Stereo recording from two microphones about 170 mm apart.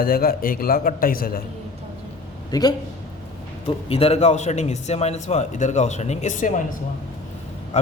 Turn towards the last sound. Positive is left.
turn(degrees=45)  # may be behind; listen again after turning